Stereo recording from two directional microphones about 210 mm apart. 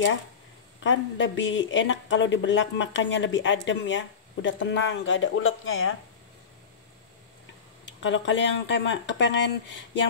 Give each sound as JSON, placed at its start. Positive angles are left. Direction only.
{"t": 0.7, "sound": "speech", "side_deg": 60}
{"t": 7.8, "sound": "speech", "side_deg": 60}